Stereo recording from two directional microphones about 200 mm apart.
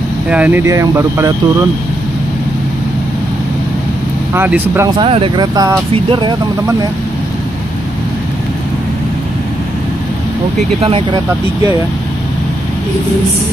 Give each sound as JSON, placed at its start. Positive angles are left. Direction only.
{"t": 0.3, "sound": "speech", "side_deg": -10}
{"t": 4.3, "sound": "speech", "side_deg": -10}
{"t": 4.9, "sound": "speech", "side_deg": -25}
{"t": 10.8, "sound": "speech", "side_deg": -30}